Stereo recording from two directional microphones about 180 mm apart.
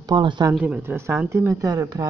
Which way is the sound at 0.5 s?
10° right (ahead or behind).